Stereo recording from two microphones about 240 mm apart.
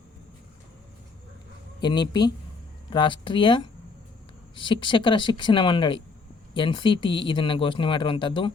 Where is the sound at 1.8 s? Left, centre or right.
Centre.